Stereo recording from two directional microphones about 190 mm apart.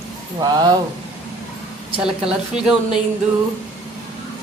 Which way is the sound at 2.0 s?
5° right (ahead or behind).